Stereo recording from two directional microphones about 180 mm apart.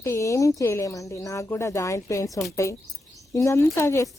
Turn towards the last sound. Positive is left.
turn(degrees=15)  # may be behind; listen again after turning